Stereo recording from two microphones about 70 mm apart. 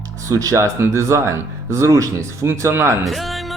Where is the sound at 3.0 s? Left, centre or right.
Centre.